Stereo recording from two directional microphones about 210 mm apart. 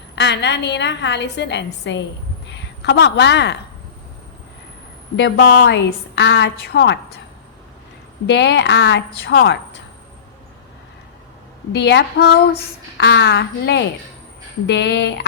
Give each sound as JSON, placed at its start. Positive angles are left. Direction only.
{"t": 0.2, "sound": "a woman's voice", "side_deg": 55}
{"t": 5.1, "sound": "a woman's voice", "side_deg": 50}
{"t": 8.3, "sound": "a woman's voice", "side_deg": 55}
{"t": 11.7, "sound": "a woman's voice", "side_deg": 55}